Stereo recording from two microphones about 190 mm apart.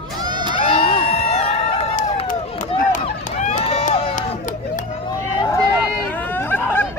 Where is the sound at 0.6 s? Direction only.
30° left (ahead or behind).